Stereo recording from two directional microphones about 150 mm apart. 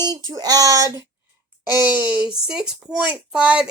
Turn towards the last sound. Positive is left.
turn(degrees=-5)  # may be behind; listen again after turning